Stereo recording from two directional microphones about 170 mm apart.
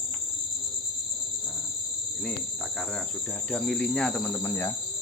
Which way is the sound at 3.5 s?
5° left (ahead or behind).